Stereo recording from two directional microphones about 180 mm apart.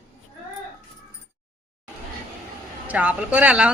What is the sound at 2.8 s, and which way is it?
Speech, 10° right (ahead or behind).